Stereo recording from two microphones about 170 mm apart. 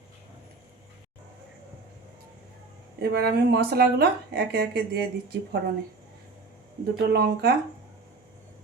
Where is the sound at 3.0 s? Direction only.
70° right (ahead or behind).